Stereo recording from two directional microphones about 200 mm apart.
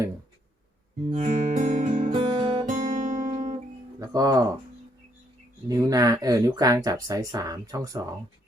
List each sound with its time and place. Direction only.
1.1 s guitar: 35° right (ahead or behind)
1.9 s guitar: 25° right (ahead or behind)
2.6 s guitar: 40° right (ahead or behind)
4.0 s speech: 20° right (ahead or behind)
5.6 s speech: 20° right (ahead or behind)